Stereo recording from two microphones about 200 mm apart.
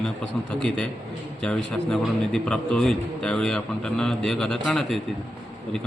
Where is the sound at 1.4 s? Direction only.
5° left (ahead or behind).